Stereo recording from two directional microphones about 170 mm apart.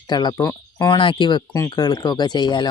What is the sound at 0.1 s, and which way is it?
Speech, 25° left (ahead or behind).